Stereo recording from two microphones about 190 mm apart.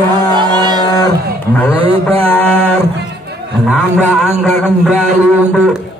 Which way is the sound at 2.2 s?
10° left (ahead or behind).